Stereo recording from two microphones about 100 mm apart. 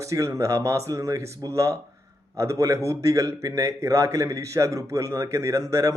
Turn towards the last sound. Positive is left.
turn(degrees=-35)  # may be behind; listen again after turning